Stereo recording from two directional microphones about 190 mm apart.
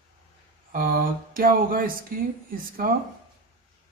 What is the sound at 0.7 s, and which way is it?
A man's voice, 50° right (ahead or behind).